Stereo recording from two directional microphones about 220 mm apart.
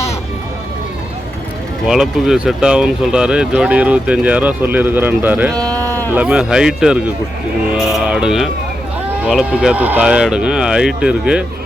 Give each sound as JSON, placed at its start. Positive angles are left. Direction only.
{"t": 1.9, "sound": "speech", "side_deg": 0}
{"t": 5.6, "sound": "a sound", "side_deg": -15}
{"t": 6.1, "sound": "speech", "side_deg": -5}